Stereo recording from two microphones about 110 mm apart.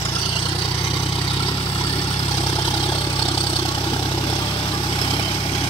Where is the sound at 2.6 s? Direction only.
55° left (ahead or behind).